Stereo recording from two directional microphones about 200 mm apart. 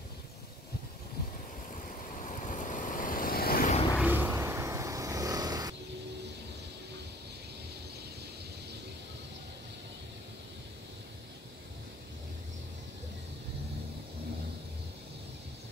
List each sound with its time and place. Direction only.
1.7 s vehicle: 40° left (ahead or behind)
4.0 s vehicle: 10° right (ahead or behind)